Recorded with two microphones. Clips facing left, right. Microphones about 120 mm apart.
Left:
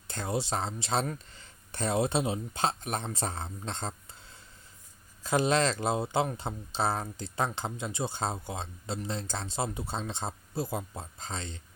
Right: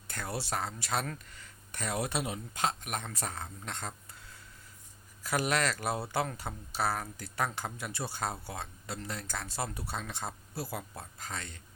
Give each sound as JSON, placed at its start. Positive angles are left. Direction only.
{"t": 0.1, "sound": "speech", "side_deg": 25}